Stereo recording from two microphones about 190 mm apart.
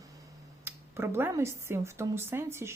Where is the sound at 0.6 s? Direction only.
15° right (ahead or behind).